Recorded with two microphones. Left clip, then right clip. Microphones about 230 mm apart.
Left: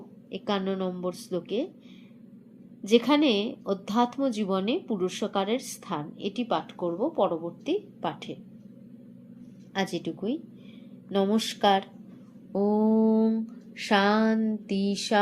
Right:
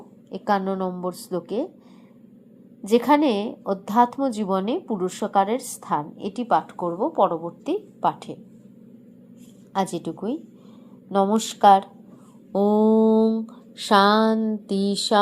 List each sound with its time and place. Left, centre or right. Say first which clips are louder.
0.3 s a woman's voice: right 7 dB; centre
2.8 s a woman's voice: right 4 dB; centre
9.7 s a woman's voice: right 5 dB; centre
12.5 s a sound: right 6 dB; right